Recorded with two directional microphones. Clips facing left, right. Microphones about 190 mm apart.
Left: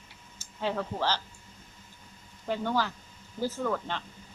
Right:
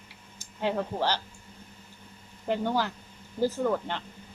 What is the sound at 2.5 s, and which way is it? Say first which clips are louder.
Speech: right 2 dB; 15° right (ahead or behind).